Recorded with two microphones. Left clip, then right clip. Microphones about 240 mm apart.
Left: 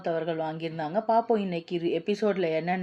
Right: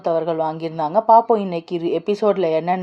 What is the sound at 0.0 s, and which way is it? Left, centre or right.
A woman's voice, centre.